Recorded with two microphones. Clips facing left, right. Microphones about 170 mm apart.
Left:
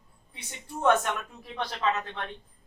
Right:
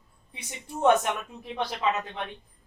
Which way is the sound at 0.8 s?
15° right (ahead or behind).